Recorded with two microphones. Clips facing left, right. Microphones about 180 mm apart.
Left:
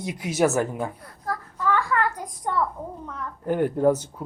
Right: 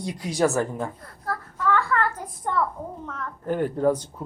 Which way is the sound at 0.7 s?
15° left (ahead or behind).